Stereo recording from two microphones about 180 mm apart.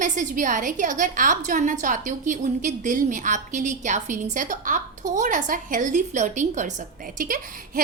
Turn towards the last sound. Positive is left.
turn(degrees=-50)  # may be behind; listen again after turning